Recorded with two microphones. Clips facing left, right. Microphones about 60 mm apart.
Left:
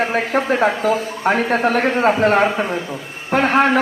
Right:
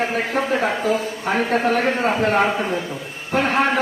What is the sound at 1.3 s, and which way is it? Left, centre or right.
Speech, left.